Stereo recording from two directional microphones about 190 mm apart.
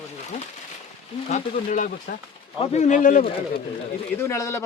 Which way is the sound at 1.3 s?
45° left (ahead or behind).